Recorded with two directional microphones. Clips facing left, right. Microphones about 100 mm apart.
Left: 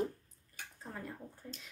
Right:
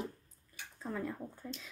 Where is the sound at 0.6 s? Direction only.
45° left (ahead or behind).